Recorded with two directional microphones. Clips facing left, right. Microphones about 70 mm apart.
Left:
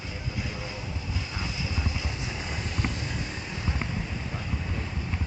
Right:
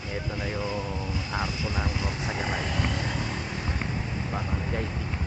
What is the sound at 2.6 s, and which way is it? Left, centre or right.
Vehicle, right.